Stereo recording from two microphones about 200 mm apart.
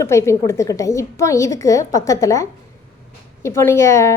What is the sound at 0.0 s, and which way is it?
A woman's voice, 15° left (ahead or behind).